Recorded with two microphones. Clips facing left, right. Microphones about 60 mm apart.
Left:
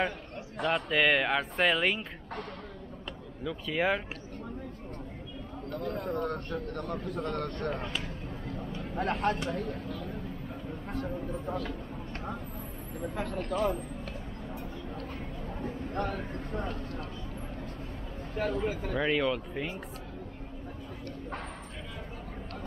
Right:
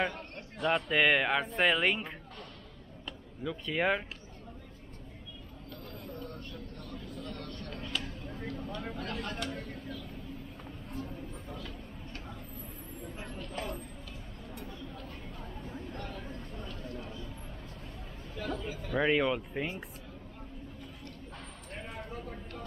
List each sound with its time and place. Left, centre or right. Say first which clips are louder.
0.7 s speech: even; centre
3.4 s speech: left 1 dB; centre
5.7 s speech: left 12 dB; left
8.9 s speech: left 9 dB; left
9.5 s a sound: left 6 dB; left
10.9 s a sound: left 7 dB; left
13.1 s speech: left 9 dB; left
15.6 s speech: left 10 dB; left
18.3 s speech: left 7 dB; left
18.9 s speech: right 2 dB; centre